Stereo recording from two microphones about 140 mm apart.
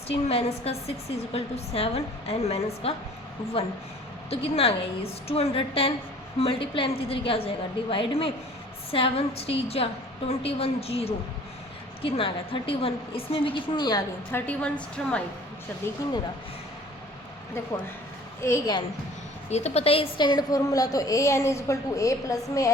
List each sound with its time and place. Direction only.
0.1 s a woman's voice: 45° left (ahead or behind)
4.3 s a woman's voice: 45° left (ahead or behind)
14.3 s a woman's voice: 10° left (ahead or behind)
18.4 s a woman's voice: 25° left (ahead or behind)
19.5 s a woman's voice: 50° left (ahead or behind); by 22.7 s 20° left (ahead or behind)